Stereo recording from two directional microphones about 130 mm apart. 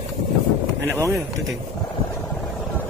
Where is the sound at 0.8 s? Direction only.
20° right (ahead or behind).